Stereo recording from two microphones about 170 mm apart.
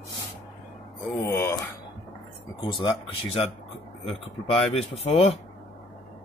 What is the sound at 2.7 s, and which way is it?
Speech, 30° left (ahead or behind).